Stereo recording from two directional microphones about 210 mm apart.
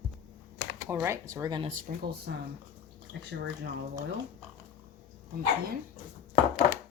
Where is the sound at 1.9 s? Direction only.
40° right (ahead or behind).